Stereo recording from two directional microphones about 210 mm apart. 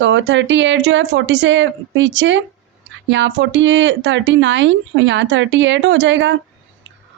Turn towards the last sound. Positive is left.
turn(degrees=-60)  # may be behind; listen again after turning